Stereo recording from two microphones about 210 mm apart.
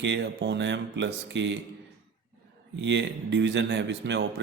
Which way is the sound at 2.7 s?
60° right (ahead or behind).